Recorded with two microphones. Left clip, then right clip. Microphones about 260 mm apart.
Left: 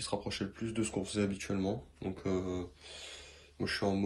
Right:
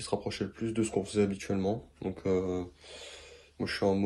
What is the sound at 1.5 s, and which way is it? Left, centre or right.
Speech, right.